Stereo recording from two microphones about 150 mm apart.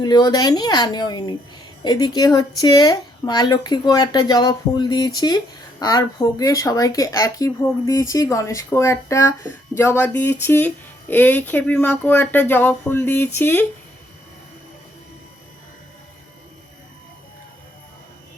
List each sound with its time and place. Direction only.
0.0 s speech: 25° left (ahead or behind)